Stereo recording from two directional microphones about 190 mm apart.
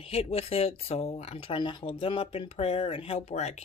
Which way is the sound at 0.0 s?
30° left (ahead or behind).